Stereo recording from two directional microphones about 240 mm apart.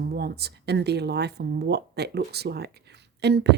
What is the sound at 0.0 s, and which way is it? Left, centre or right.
A woman's voice, right.